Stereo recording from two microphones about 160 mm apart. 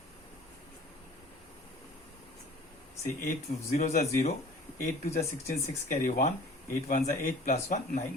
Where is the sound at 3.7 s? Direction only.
45° left (ahead or behind).